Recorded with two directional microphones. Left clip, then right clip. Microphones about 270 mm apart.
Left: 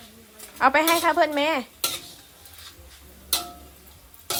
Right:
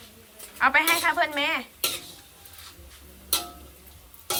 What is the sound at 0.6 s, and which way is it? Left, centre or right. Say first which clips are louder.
A woman's voice: left 2 dB; centre.